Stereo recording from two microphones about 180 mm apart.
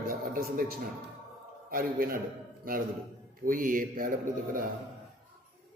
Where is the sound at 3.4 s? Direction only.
50° right (ahead or behind).